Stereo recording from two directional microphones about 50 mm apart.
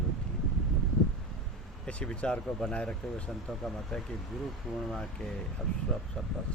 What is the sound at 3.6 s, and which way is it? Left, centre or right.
Speech, centre.